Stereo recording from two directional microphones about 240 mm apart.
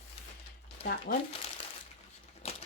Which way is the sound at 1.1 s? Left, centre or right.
Left.